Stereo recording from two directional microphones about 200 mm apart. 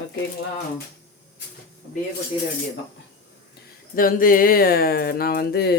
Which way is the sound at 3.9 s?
45° left (ahead or behind).